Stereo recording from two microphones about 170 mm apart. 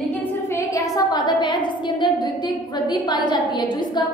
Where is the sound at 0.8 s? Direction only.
25° left (ahead or behind).